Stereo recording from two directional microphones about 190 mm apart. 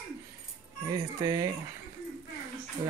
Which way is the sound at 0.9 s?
20° right (ahead or behind).